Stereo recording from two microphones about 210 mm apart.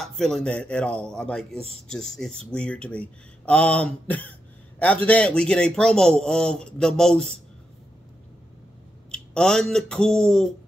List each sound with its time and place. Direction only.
0.0 s speech: centre (ahead or behind)
9.1 s speech: 5° left (ahead or behind)